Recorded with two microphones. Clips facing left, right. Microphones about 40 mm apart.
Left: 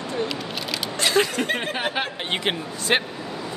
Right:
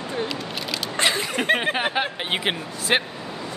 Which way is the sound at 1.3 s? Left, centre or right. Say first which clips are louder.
Right 3 dB; right.